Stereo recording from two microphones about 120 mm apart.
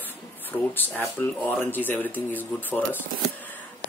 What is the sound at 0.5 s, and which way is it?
Speech, 15° left (ahead or behind).